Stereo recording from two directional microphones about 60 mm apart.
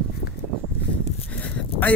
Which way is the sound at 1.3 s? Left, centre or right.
Left.